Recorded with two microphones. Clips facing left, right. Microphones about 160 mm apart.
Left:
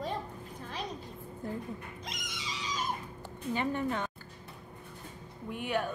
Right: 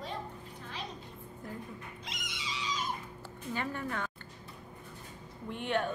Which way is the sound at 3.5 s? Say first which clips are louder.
Left 5 dB; 20° left (ahead or behind).